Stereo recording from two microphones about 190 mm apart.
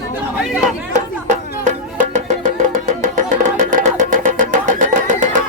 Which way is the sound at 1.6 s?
40° right (ahead or behind).